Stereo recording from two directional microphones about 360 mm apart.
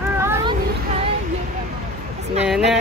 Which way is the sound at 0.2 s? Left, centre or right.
Centre.